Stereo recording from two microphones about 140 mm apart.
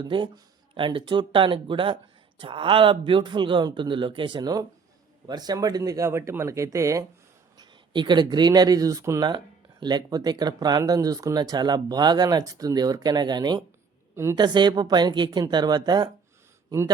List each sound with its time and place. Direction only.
0.0 s speech: 35° right (ahead or behind)